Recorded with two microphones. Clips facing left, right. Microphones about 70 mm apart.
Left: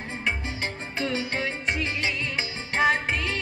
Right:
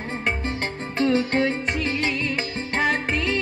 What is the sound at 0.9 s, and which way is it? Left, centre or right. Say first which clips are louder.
Music: right 9 dB; right.